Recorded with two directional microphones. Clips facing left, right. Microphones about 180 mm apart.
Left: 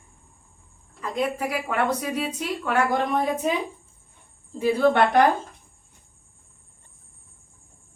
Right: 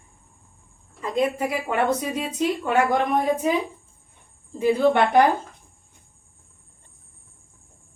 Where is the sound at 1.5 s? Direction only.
20° right (ahead or behind).